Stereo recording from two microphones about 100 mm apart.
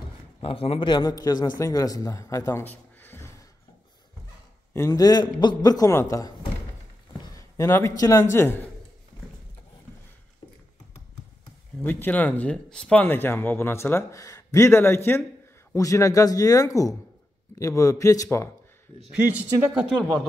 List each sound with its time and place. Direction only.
0.4 s a man's voice: 75° left (ahead or behind)
0.8 s a man's voice: 45° left (ahead or behind)
2.6 s a sound: 20° left (ahead or behind)
4.7 s speech: 30° left (ahead or behind)
5.0 s a man's voice: 45° left (ahead or behind)
5.9 s a man's voice: 30° left (ahead or behind)
7.3 s a man's voice: 30° left (ahead or behind)
11.8 s a man's voice: 20° left (ahead or behind)
19.1 s speech: 15° right (ahead or behind)